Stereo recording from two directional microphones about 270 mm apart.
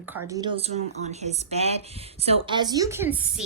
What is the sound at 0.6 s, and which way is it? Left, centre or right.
A woman's voice, right.